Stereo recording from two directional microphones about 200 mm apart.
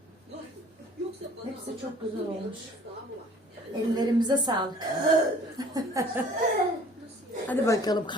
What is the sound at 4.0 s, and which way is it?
A woman's voice, 20° right (ahead or behind).